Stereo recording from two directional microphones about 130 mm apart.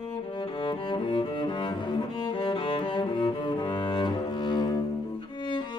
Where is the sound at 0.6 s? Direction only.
35° left (ahead or behind).